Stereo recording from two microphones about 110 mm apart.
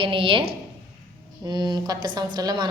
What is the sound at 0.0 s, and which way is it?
Speech, 50° right (ahead or behind).